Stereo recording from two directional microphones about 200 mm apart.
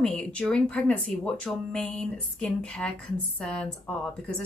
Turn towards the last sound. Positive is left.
turn(degrees=5)  # may be behind; listen again after turning